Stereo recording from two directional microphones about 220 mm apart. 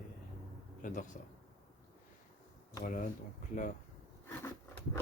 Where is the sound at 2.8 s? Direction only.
35° left (ahead or behind).